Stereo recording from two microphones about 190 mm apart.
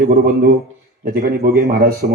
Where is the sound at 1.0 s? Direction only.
50° right (ahead or behind).